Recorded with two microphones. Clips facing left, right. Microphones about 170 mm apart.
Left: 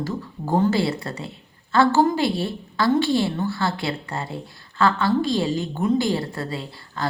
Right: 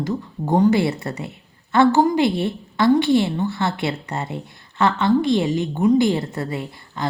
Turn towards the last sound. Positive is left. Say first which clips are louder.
# right 3 dB
turn(degrees=-20)  # may be behind; listen again after turning